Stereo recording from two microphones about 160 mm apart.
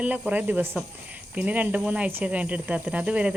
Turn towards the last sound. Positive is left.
turn(degrees=-5)  # may be behind; listen again after turning